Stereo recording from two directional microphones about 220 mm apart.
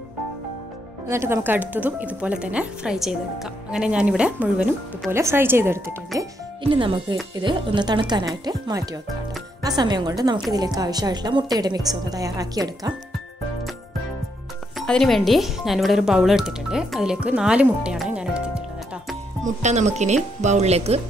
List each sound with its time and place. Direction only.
1.0 s speech: 10° right (ahead or behind)
6.6 s speech: 25° right (ahead or behind)
14.8 s speech: centre (ahead or behind)
19.4 s speech: 30° right (ahead or behind)